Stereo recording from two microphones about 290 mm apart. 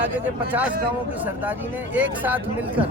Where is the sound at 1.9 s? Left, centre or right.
Centre.